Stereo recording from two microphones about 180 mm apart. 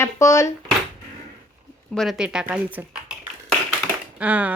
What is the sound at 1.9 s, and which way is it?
Speech, centre (ahead or behind).